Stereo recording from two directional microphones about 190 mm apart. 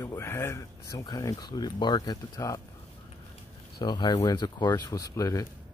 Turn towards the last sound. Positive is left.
turn(degrees=15)  # may be behind; listen again after turning